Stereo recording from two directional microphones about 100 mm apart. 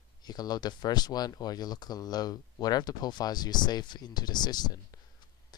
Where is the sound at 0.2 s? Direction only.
40° left (ahead or behind).